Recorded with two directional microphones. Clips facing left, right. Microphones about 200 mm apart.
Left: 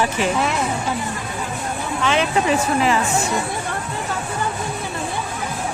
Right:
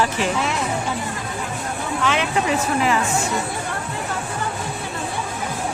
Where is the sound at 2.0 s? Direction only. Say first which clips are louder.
Left 2 dB; 30° left (ahead or behind).